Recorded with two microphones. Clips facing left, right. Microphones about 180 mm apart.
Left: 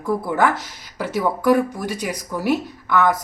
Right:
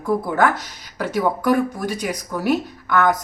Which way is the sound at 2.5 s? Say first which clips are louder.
Even; 5° left (ahead or behind).